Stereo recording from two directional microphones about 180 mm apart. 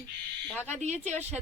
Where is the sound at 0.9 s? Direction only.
40° right (ahead or behind).